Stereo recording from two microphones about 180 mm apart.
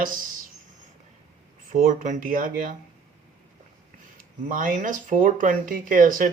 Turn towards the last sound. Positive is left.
turn(degrees=-50)  # may be behind; listen again after turning